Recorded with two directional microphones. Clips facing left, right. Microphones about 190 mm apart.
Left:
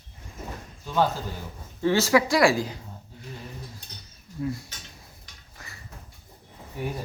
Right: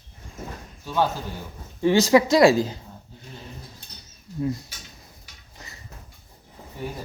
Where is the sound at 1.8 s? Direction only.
15° right (ahead or behind).